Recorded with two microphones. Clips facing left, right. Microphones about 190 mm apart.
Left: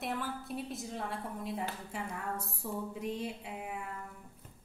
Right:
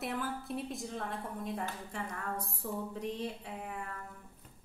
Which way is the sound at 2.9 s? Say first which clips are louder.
Even; 10° left (ahead or behind).